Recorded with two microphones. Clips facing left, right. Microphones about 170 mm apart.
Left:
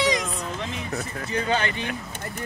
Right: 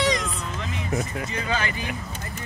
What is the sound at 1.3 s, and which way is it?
Speech, 30° left (ahead or behind).